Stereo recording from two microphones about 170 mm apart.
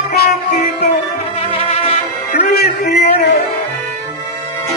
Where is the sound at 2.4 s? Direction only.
70° left (ahead or behind).